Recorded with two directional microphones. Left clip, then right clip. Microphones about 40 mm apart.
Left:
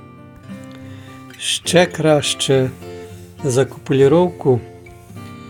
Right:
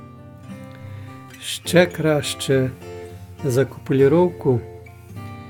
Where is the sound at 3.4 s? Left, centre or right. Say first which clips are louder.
Left 3 dB; centre.